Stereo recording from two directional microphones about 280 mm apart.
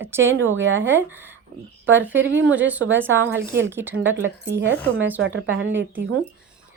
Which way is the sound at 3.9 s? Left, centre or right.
Right.